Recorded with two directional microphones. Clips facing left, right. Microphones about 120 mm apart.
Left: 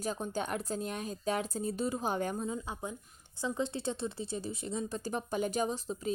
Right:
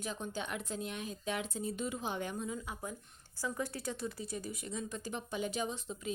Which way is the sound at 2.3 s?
30° left (ahead or behind).